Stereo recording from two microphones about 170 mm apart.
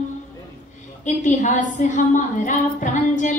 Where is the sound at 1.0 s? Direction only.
45° left (ahead or behind).